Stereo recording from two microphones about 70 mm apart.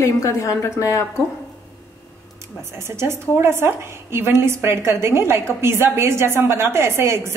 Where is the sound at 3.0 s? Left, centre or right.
Right.